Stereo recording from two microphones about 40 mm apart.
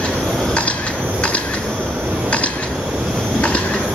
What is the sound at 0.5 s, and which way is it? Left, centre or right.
Mechanisms, left.